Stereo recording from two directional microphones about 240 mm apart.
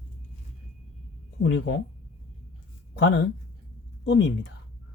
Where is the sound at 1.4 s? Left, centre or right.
Left.